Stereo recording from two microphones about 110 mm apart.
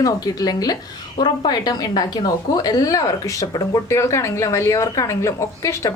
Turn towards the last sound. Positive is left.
turn(degrees=30)  # may be behind; listen again after turning